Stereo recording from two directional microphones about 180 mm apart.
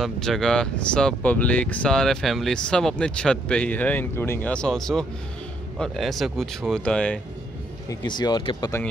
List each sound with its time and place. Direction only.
0.0 s speech: centre (ahead or behind)
7.9 s speech: 25° left (ahead or behind)